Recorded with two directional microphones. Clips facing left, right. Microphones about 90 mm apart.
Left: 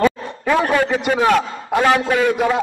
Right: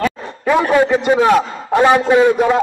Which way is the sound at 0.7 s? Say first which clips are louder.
Right 5 dB; 20° right (ahead or behind).